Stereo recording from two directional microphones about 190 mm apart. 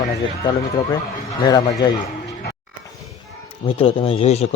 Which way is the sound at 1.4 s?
20° left (ahead or behind).